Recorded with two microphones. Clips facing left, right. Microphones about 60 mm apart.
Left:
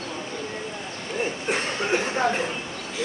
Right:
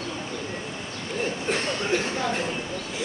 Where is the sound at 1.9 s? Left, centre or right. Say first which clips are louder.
Left 4 dB; left.